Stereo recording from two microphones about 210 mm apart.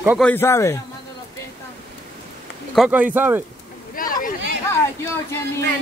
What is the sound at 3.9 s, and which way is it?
Vehicle, 40° left (ahead or behind).